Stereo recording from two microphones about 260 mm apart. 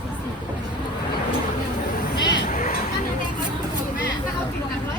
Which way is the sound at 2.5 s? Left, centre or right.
Left.